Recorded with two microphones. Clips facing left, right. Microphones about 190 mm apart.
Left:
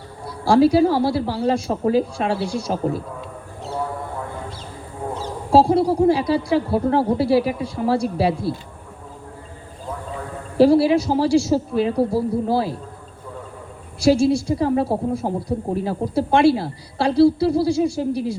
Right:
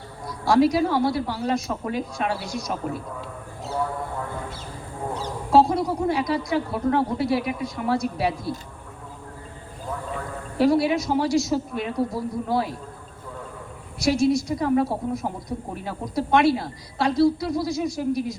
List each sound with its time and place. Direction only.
0.3 s speech: 30° left (ahead or behind)
5.5 s speech: 30° left (ahead or behind)
10.6 s speech: 30° left (ahead or behind)
14.0 s speech: 30° left (ahead or behind)